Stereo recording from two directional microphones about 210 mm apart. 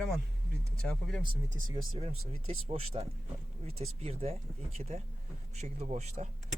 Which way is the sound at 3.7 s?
85° right.